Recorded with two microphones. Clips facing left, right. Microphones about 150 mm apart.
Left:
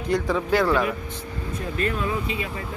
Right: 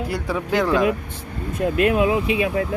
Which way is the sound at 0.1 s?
15° right (ahead or behind).